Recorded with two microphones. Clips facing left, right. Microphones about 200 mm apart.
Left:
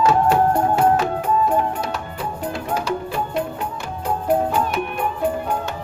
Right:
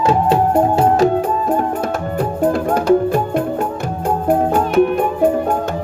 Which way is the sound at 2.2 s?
50° right (ahead or behind).